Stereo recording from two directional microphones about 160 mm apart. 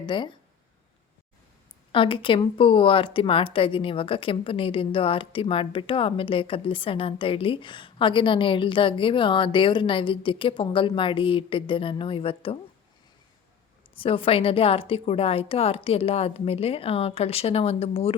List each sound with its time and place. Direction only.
0.0 s speech: 30° left (ahead or behind)
1.9 s speech: 30° left (ahead or behind)
13.9 s speech: 35° left (ahead or behind)